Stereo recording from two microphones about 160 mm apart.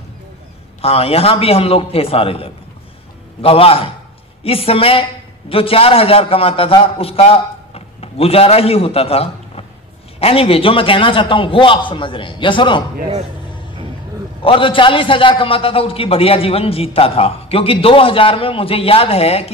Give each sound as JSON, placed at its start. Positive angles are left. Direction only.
{"t": 0.7, "sound": "a man's voice", "side_deg": 40}
{"t": 14.4, "sound": "a man's voice", "side_deg": 35}